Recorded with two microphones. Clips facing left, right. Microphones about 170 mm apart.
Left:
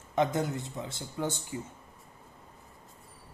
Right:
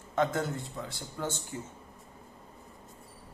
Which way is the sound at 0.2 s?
20° left (ahead or behind).